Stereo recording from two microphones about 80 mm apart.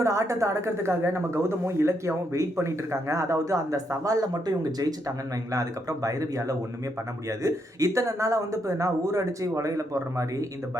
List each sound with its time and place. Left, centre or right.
0.0 s speech: right